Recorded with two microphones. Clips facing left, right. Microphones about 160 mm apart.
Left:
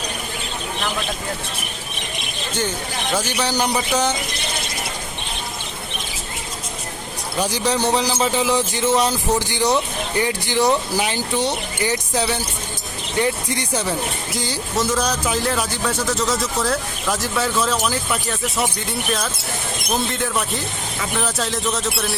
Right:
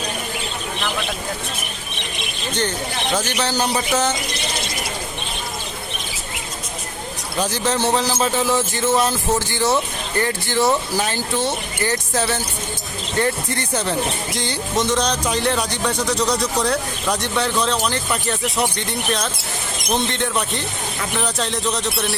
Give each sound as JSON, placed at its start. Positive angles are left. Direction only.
{"t": 3.4, "sound": "speech", "side_deg": 15}
{"t": 7.5, "sound": "speech", "side_deg": 15}